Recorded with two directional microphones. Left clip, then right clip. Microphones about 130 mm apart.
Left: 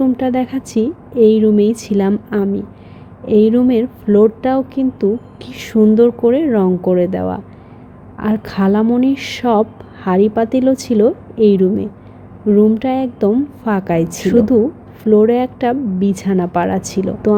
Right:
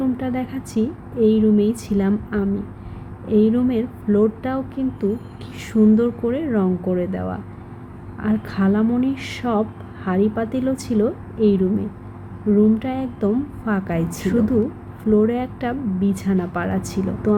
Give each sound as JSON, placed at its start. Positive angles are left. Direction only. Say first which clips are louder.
{"t": 0.0, "sound": "a woman's voice", "louder": "left 8 dB", "side_deg": 45}